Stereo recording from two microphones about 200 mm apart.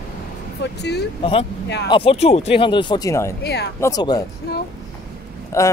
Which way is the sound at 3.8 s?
20° left (ahead or behind).